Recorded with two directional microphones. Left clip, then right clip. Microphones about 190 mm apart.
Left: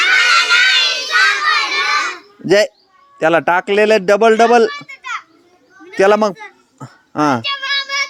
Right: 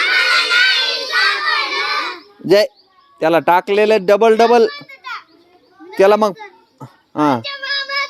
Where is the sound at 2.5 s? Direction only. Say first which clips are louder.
Even; 10° left (ahead or behind).